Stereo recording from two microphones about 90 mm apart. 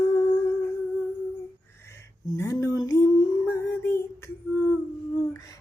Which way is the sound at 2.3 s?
35° left (ahead or behind).